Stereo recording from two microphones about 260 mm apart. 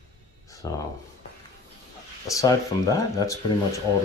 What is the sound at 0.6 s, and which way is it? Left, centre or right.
Speech, centre.